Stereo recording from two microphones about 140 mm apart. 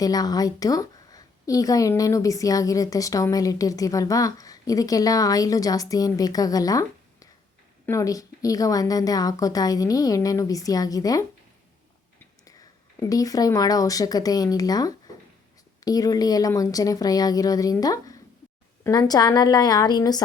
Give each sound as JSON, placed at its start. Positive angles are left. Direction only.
{"t": 0.0, "sound": "a woman's voice", "side_deg": 25}
{"t": 13.0, "sound": "a woman's voice", "side_deg": 25}